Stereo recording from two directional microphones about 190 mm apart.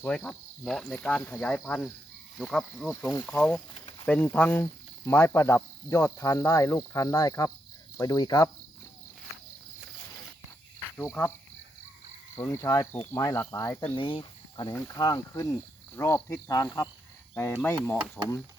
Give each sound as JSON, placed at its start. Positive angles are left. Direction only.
{"t": 0.0, "sound": "speech", "side_deg": 10}
{"t": 10.9, "sound": "speech", "side_deg": 10}
{"t": 12.4, "sound": "speech", "side_deg": 15}
{"t": 13.9, "sound": "speech", "side_deg": 25}